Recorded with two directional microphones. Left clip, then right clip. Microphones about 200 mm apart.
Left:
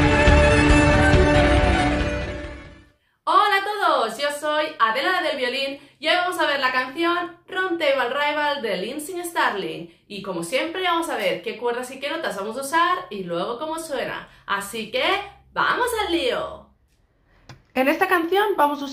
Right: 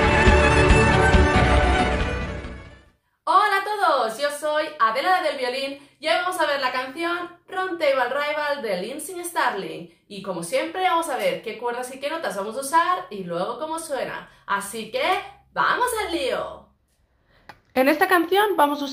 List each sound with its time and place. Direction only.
0.4 s music: centre (ahead or behind)
3.3 s a sound: 5° right (ahead or behind)
7.4 s a woman's voice: 5° right (ahead or behind)
17.7 s a woman's voice: 25° right (ahead or behind)